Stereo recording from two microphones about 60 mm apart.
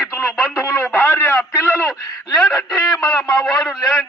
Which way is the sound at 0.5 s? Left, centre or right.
Left.